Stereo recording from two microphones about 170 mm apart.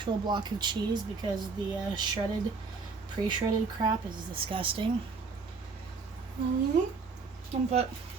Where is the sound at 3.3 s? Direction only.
30° right (ahead or behind).